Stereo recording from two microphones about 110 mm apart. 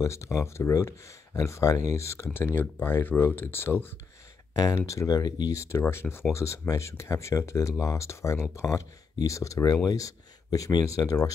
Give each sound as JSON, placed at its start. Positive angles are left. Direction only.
{"t": 0.0, "sound": "speech", "side_deg": 25}